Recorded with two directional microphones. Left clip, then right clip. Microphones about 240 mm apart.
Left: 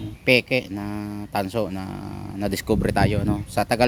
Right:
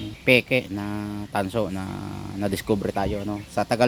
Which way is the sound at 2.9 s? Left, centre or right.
Centre.